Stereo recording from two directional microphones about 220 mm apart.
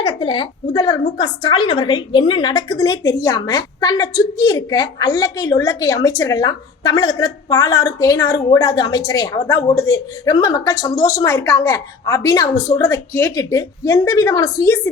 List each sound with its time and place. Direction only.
0.0 s a woman's voice: 20° left (ahead or behind)